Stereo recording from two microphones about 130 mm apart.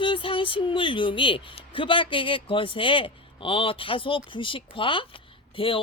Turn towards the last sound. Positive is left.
turn(degrees=45)  # may be behind; listen again after turning